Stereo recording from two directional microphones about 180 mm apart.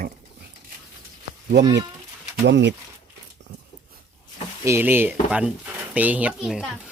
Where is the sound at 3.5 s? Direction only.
70° right (ahead or behind).